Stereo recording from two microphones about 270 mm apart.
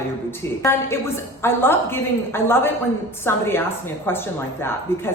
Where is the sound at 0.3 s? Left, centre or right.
Centre.